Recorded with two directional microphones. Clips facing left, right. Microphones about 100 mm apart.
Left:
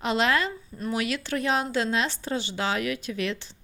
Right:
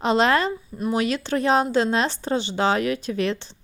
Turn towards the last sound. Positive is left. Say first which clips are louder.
# right 5 dB
turn(degrees=-35)  # may be behind; listen again after turning